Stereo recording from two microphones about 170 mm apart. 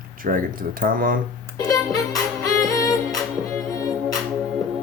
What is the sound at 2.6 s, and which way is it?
Music, 20° left (ahead or behind).